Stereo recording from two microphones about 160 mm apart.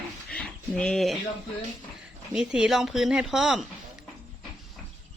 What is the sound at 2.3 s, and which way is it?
Speech, 5° right (ahead or behind).